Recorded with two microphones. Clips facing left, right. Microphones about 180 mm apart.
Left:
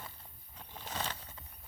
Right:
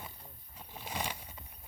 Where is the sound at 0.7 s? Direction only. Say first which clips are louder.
Right 1 dB; 10° right (ahead or behind).